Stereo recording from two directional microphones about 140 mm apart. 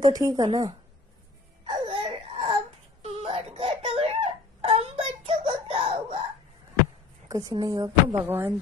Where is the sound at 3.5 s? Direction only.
45° right (ahead or behind).